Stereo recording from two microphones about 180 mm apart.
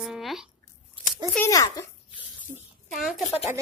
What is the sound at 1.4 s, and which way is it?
Speech, 20° left (ahead or behind).